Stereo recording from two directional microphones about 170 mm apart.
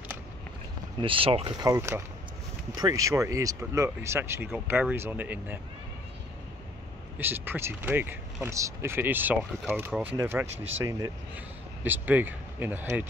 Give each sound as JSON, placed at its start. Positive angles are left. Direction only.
{"t": 1.0, "sound": "speech", "side_deg": -30}
{"t": 7.2, "sound": "speech", "side_deg": -10}